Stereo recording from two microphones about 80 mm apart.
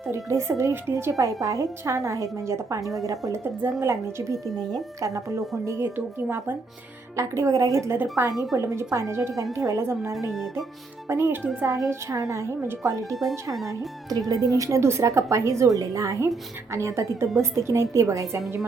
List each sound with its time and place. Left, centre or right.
0.1 s a woman's voice: right
1.1 s speech: right
3.6 s a woman's voice: right
8.2 s a woman's voice: right